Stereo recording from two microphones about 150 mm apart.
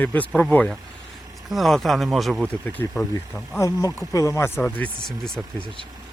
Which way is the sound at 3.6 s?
20° left (ahead or behind).